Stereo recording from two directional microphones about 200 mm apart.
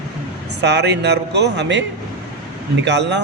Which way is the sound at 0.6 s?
60° right (ahead or behind).